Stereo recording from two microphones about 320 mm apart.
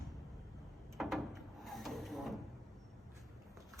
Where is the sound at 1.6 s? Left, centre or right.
Centre.